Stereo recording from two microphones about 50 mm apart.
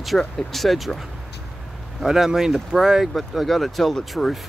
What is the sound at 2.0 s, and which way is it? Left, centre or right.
Speech, centre.